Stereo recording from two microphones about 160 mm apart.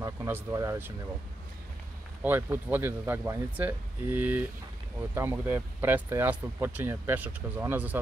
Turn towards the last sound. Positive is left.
turn(degrees=-10)  # may be behind; listen again after turning